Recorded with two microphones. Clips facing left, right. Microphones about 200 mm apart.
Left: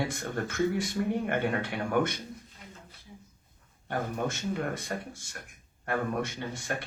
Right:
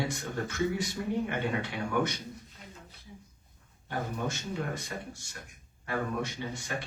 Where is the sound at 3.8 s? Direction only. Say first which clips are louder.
Left 2 dB; 55° left (ahead or behind).